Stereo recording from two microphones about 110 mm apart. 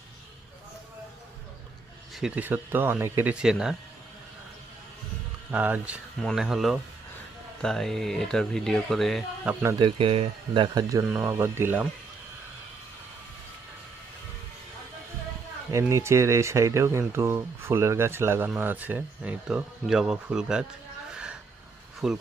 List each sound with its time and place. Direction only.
2.1 s speech: 5° right (ahead or behind)
2.4 s speech: 15° right (ahead or behind)
3.3 s speech: 5° right (ahead or behind)
5.5 s speech: 15° right (ahead or behind)
6.1 s speech: centre (ahead or behind)
9.7 s speech: 50° right (ahead or behind)
11.1 s speech: 20° right (ahead or behind)
15.7 s speech: 25° right (ahead or behind); by 20.7 s 10° right (ahead or behind)
21.1 s a sound: 10° right (ahead or behind)
22.0 s speech: 5° right (ahead or behind)